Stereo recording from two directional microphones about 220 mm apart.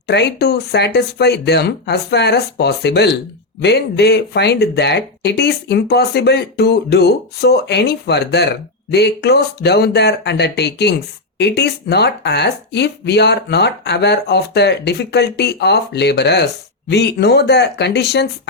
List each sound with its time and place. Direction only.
0.1 s speech: 50° left (ahead or behind)